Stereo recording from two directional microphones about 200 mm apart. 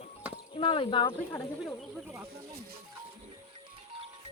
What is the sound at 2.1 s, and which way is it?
Speech, 10° right (ahead or behind).